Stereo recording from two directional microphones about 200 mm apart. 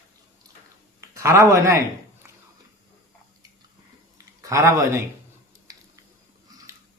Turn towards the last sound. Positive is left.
turn(degrees=-20)  # may be behind; listen again after turning